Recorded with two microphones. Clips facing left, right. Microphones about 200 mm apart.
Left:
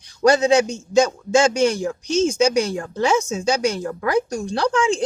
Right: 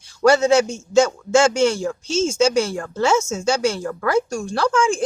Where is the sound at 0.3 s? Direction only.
15° left (ahead or behind).